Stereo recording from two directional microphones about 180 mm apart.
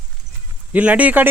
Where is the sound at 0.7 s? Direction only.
10° right (ahead or behind).